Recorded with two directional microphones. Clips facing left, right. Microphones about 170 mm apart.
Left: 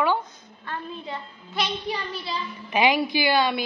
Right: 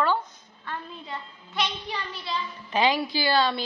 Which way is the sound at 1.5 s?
10° left (ahead or behind).